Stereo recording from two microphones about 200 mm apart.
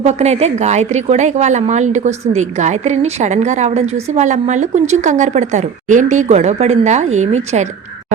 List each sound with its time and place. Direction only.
0.0 s a woman's voice: 35° right (ahead or behind)